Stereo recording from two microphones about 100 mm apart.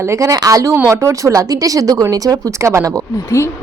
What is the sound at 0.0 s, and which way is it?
Speech, 30° right (ahead or behind).